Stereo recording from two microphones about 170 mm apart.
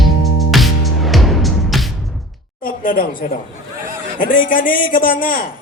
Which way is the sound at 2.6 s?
60° left (ahead or behind).